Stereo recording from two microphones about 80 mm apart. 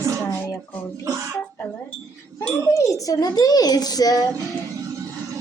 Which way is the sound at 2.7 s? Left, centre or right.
Left.